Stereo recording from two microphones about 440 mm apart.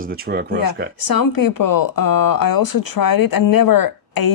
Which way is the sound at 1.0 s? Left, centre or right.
Left.